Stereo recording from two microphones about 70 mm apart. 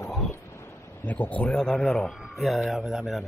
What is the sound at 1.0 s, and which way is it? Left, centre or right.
Speech, left.